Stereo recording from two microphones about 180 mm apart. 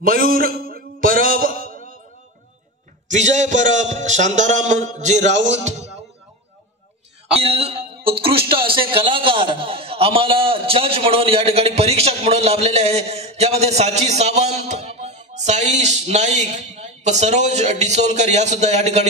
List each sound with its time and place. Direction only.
0.0 s a sound: 55° right (ahead or behind)
3.1 s a man's voice: 40° right (ahead or behind)
5.3 s music: 90° right
7.3 s a man's voice: 35° right (ahead or behind)